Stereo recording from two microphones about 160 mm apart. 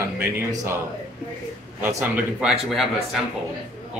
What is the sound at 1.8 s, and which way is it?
Speech, 15° right (ahead or behind).